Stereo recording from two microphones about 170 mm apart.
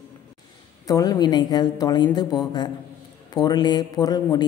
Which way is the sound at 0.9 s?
20° left (ahead or behind).